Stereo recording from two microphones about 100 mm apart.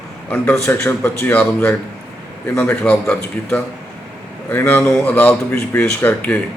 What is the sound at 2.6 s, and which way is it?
Speech, 15° left (ahead or behind).